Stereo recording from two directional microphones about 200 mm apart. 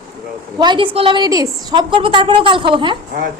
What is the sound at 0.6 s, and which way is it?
A woman's voice, 25° right (ahead or behind).